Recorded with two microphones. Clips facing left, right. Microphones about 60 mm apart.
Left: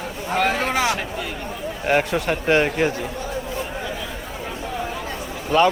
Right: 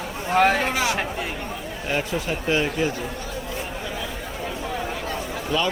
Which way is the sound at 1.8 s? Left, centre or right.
Left.